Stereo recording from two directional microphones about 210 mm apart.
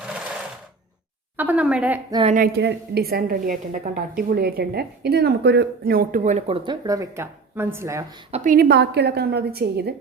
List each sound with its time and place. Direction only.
1.4 s speech: 5° right (ahead or behind)
2.0 s a woman's voice: 20° right (ahead or behind)
2.3 s a woman's voice: 50° right (ahead or behind); by 6.6 s 35° right (ahead or behind)
6.7 s speech: 15° right (ahead or behind)
8.3 s a woman's voice: 45° right (ahead or behind)